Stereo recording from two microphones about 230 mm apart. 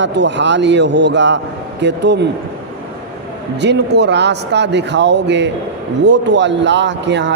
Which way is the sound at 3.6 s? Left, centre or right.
Right.